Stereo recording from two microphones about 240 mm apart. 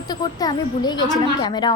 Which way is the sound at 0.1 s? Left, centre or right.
Centre.